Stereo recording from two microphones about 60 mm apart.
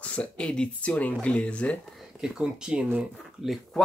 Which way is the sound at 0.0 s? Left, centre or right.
Left.